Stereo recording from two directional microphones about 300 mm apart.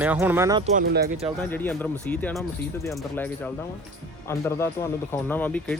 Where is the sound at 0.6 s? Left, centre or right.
Right.